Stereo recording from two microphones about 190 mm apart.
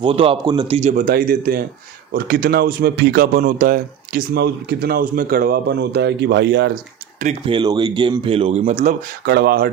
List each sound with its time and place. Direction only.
0.0 s a man's voice: 30° right (ahead or behind); by 6.7 s 65° right (ahead or behind)
7.4 s speech: 25° right (ahead or behind); by 9.6 s 55° right (ahead or behind)